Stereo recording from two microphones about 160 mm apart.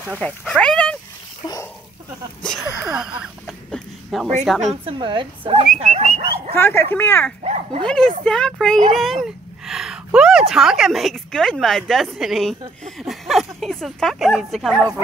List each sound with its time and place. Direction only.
0.2 s speech: 5° left (ahead or behind)
2.4 s a woman's voice: 5° right (ahead or behind)
4.8 s speech: 30° right (ahead or behind)
5.8 s bird: 40° right (ahead or behind)
6.5 s speech: 15° left (ahead or behind)
7.8 s a woman's voice: 5° left (ahead or behind)
8.9 s a sound: centre (ahead or behind)
10.5 s a woman's voice: 5° right (ahead or behind)